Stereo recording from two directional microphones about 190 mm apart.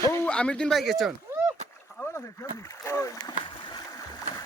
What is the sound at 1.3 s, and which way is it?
Rowboat, 15° right (ahead or behind).